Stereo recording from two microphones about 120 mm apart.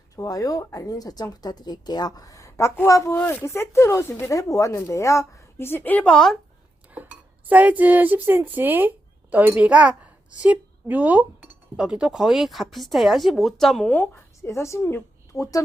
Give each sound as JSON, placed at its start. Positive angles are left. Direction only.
{"t": 0.2, "sound": "speech", "side_deg": 30}
{"t": 6.9, "sound": "a sound", "side_deg": -15}
{"t": 9.3, "sound": "a woman's voice", "side_deg": -15}
{"t": 13.9, "sound": "speech", "side_deg": 20}